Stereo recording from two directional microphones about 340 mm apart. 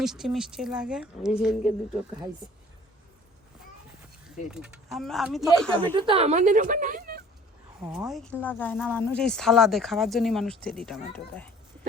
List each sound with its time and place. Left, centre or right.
0.0 s speech: centre
4.5 s speech: centre
5.9 s a woman's voice: centre
7.9 s speech: centre